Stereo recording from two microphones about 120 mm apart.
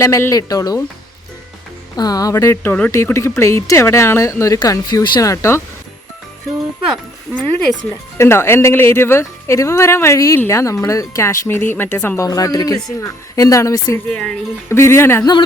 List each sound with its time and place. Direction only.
0.0 s speech: 25° left (ahead or behind)
2.0 s speech: 30° left (ahead or behind)
7.3 s speech: centre (ahead or behind)
8.2 s speech: 20° left (ahead or behind)
14.1 s speech: 10° left (ahead or behind)
14.7 s speech: 20° left (ahead or behind)
15.2 s speech: 35° left (ahead or behind)